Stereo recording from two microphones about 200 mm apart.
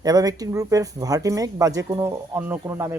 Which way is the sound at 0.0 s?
20° right (ahead or behind).